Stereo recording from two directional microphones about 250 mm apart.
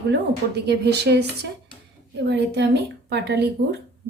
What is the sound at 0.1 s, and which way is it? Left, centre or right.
Speech, right.